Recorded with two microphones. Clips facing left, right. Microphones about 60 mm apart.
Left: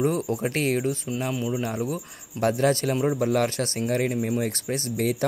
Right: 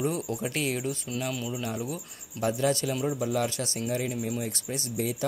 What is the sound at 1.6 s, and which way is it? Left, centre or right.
Speech, left.